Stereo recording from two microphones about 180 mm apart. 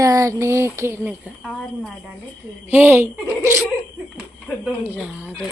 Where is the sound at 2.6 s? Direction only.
10° right (ahead or behind).